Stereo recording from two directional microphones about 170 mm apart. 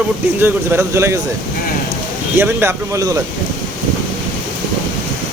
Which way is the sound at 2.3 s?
15° right (ahead or behind).